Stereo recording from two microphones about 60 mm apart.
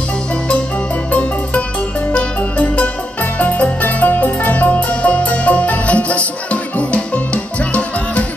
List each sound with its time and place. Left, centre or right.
2.1 s music: left